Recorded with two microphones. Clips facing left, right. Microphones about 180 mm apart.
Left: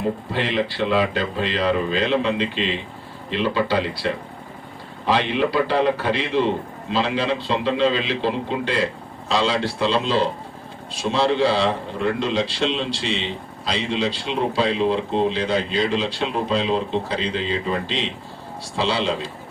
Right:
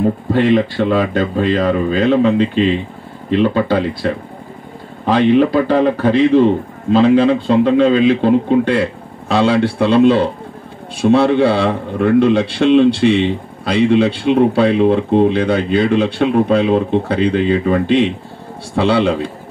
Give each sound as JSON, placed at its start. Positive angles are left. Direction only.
{"t": 0.3, "sound": "a man's voice", "side_deg": -50}